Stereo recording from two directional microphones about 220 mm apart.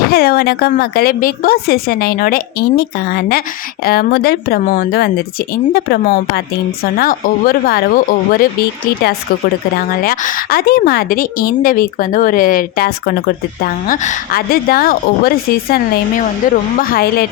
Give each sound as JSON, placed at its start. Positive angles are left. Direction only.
{"t": 0.1, "sound": "a woman's voice", "side_deg": 45}
{"t": 9.7, "sound": "a woman's voice", "side_deg": 40}